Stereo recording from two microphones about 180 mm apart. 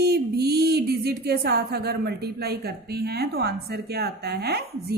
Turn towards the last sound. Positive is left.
turn(degrees=-65)  # may be behind; listen again after turning